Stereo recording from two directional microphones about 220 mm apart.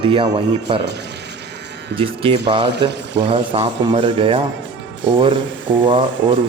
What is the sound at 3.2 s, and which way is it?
Speech, 20° right (ahead or behind).